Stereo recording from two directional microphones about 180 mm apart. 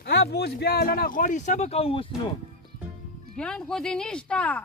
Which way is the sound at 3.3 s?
5° left (ahead or behind).